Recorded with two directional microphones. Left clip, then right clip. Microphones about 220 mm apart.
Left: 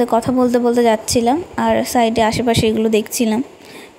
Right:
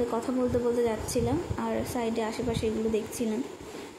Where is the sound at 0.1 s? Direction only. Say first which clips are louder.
Left 13 dB; 40° left (ahead or behind).